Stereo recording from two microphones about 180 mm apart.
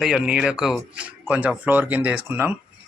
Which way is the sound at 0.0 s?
5° right (ahead or behind).